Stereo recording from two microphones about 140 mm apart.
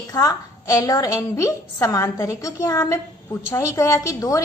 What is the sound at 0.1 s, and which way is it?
A woman's voice, 25° left (ahead or behind).